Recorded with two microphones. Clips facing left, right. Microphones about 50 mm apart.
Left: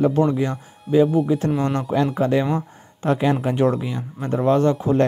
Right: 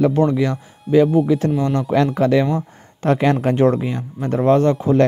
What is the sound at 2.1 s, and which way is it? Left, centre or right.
Speech, right.